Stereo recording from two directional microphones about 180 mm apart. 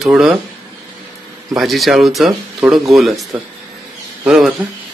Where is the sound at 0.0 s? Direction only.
Centre (ahead or behind).